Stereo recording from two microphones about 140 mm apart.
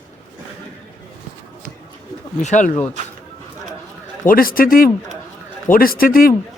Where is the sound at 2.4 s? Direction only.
60° left (ahead or behind).